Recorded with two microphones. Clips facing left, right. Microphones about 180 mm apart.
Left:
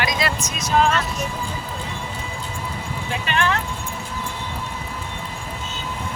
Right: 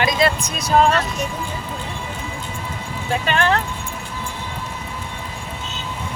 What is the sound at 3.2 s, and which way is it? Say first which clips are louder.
Speech: right 3 dB; 40° right (ahead or behind).